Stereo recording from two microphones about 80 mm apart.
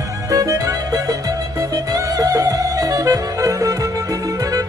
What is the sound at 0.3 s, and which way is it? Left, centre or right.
Music, right.